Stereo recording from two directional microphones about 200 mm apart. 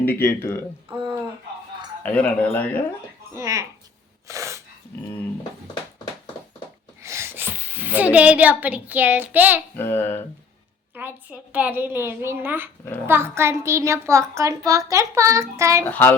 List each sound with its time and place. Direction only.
0.0 s speech: 10° left (ahead or behind)
0.9 s a sound: 25° right (ahead or behind)
2.0 s speech: 5° left (ahead or behind)
3.3 s a woman's voice: 15° right (ahead or behind)
4.3 s sneeze: 15° right (ahead or behind)
7.0 s a woman's voice: 15° right (ahead or behind)
9.7 s speech: 10° left (ahead or behind)
10.9 s a woman's voice: 10° right (ahead or behind)
15.9 s speech: 10° left (ahead or behind)